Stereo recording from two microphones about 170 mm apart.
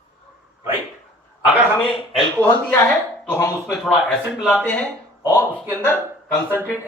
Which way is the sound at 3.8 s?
5° left (ahead or behind).